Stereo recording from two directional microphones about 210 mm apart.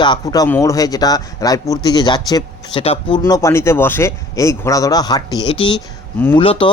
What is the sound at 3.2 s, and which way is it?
Speech, 15° left (ahead or behind).